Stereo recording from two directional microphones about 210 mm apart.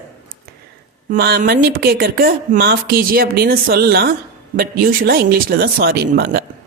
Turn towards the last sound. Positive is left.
turn(degrees=-50)  # may be behind; listen again after turning